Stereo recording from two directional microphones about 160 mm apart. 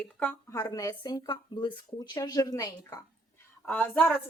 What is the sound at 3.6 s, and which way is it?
Speech, 10° left (ahead or behind).